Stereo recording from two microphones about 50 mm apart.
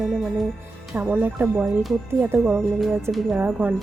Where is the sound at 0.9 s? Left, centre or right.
Right.